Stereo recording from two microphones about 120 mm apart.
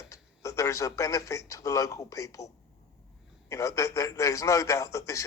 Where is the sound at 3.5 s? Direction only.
25° left (ahead or behind).